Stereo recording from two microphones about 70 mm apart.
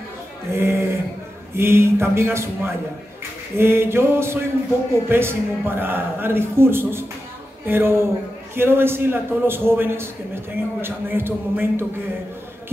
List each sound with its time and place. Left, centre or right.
0.5 s a man's voice: right